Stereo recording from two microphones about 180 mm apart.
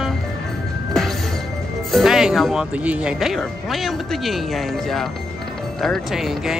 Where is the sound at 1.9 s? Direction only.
Centre (ahead or behind).